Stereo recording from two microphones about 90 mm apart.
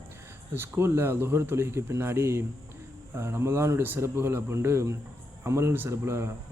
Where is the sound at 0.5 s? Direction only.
25° right (ahead or behind).